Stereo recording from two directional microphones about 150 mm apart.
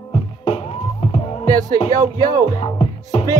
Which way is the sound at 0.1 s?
40° left (ahead or behind).